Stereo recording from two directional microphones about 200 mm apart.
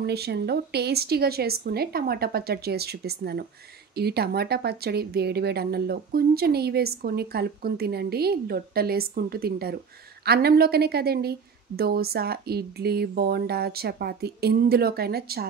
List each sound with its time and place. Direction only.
0.0 s speech: 55° right (ahead or behind)